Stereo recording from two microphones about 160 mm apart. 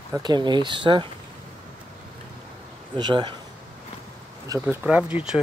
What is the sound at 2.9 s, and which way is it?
Speech, 30° right (ahead or behind).